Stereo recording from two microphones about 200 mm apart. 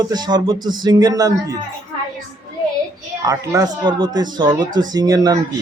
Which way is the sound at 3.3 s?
15° right (ahead or behind).